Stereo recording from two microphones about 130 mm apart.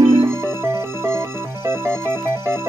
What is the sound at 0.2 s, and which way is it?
Music, 20° right (ahead or behind).